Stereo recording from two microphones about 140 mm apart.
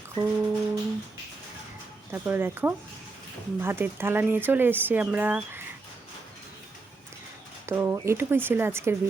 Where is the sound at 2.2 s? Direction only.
15° right (ahead or behind).